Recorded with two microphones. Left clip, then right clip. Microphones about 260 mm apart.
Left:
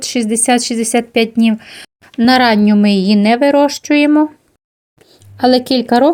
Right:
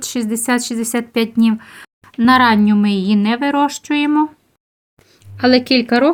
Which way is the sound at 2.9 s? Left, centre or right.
Right.